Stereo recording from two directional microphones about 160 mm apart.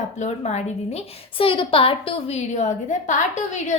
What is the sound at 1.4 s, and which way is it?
A woman's voice, 35° left (ahead or behind).